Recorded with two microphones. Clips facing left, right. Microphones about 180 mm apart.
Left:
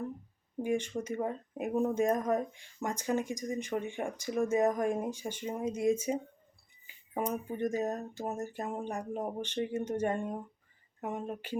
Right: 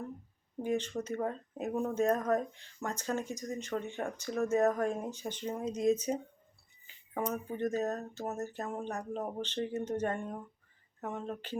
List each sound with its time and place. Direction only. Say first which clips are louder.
0.6 s speech: left 1 dB; 10° left (ahead or behind)